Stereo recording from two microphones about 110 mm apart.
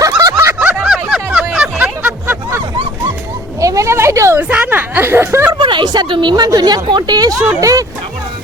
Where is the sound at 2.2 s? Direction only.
20° right (ahead or behind).